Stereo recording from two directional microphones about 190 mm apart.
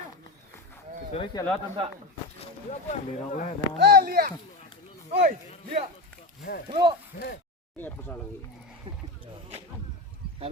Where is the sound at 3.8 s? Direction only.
55° right (ahead or behind).